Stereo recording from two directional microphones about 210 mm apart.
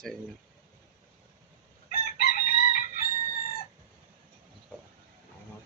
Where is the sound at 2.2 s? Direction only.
45° left (ahead or behind).